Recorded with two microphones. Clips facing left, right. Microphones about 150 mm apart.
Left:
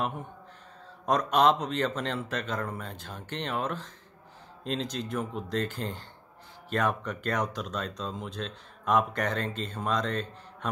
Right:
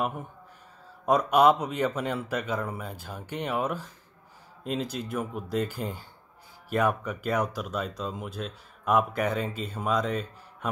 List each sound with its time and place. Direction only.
1.0 s speech: 10° right (ahead or behind)